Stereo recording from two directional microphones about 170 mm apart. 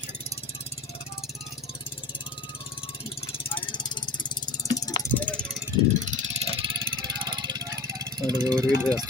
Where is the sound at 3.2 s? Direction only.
30° left (ahead or behind).